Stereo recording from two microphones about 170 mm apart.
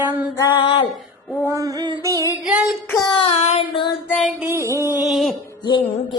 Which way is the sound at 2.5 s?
5° right (ahead or behind).